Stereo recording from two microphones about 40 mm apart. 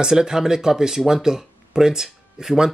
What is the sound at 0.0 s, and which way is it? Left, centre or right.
Speech, centre.